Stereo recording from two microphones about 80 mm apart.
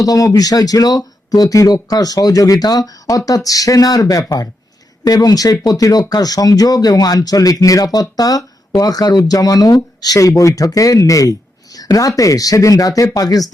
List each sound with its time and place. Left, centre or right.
0.0 s speech: left